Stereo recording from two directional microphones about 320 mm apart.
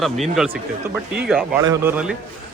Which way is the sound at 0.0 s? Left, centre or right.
Centre.